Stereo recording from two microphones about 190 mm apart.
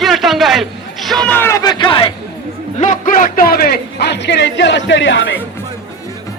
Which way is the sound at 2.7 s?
40° left (ahead or behind).